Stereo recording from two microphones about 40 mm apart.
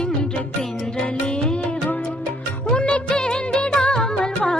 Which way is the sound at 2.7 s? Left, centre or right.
Left.